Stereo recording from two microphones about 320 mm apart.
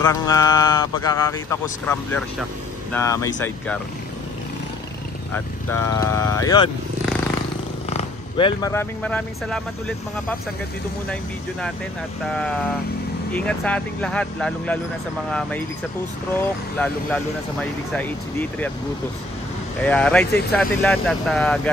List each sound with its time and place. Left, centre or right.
0.0 s a man's voice: centre
5.3 s a man's voice: centre
7.9 s speech: centre
13.3 s speech: centre
16.3 s speech: centre
19.8 s speech: centre